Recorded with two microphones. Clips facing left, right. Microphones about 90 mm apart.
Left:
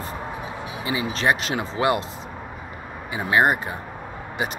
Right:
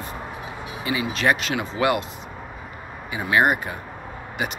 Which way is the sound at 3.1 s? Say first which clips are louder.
Even; 30° left (ahead or behind).